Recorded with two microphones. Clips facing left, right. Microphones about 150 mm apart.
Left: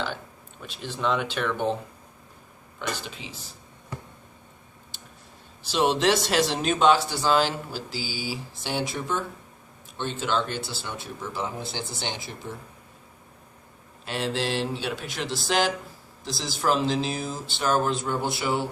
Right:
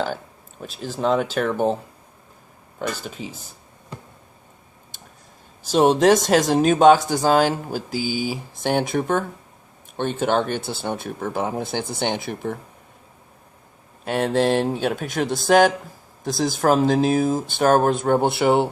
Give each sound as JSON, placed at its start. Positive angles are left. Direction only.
{"t": 0.6, "sound": "speech", "side_deg": -40}
{"t": 5.6, "sound": "speech", "side_deg": -45}
{"t": 14.0, "sound": "speech", "side_deg": -55}